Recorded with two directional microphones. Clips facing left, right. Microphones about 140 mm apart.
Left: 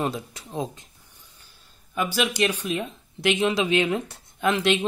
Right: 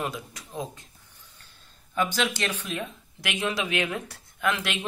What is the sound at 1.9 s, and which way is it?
Speech, 10° left (ahead or behind).